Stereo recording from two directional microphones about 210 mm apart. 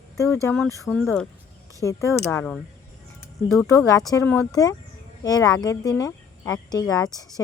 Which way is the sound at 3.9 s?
15° left (ahead or behind).